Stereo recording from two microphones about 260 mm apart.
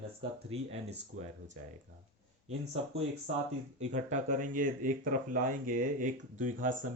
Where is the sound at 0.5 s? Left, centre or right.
Right.